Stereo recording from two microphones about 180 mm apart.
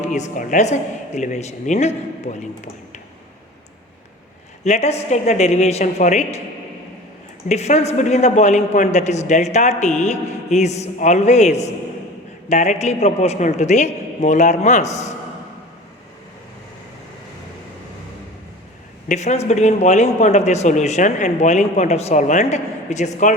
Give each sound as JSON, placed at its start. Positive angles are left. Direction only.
{"t": 0.1, "sound": "a man's voice", "side_deg": 45}
{"t": 4.6, "sound": "a man's voice", "side_deg": 40}
{"t": 7.4, "sound": "a man's voice", "side_deg": 40}
{"t": 19.0, "sound": "a man's voice", "side_deg": 40}